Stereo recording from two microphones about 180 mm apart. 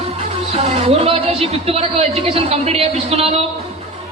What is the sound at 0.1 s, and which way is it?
Speech, 35° right (ahead or behind).